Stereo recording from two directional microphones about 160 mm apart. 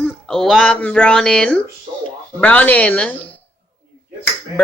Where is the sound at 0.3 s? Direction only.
5° left (ahead or behind).